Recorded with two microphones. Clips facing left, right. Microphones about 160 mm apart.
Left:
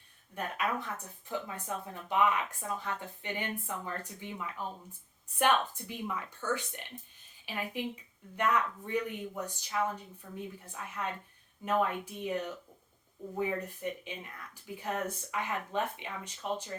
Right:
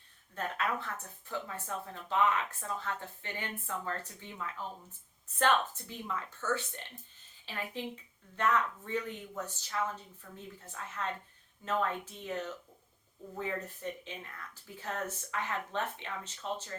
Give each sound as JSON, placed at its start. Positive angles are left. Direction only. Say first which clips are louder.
{"t": 0.3, "sound": "speech", "louder": "left 1 dB", "side_deg": 15}
{"t": 14.0, "sound": "speech", "louder": "left 2 dB", "side_deg": 15}